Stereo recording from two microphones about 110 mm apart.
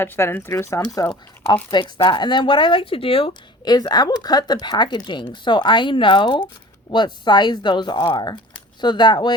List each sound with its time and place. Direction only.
0.0 s speech: 20° left (ahead or behind)
1.7 s speech: 45° left (ahead or behind)
3.6 s speech: 40° left (ahead or behind)